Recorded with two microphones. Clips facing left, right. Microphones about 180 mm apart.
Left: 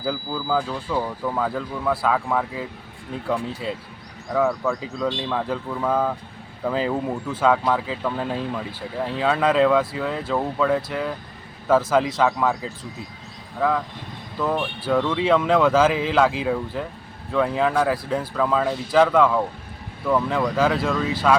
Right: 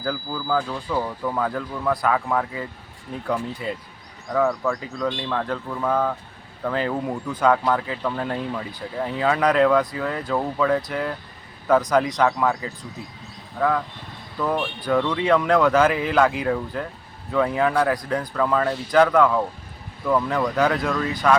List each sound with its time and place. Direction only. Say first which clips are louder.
0.0 s speech: left 1 dB; 10° left (ahead or behind)